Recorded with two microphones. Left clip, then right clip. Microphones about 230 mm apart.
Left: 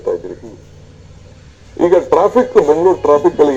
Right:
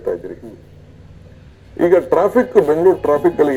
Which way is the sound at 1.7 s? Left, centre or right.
Right.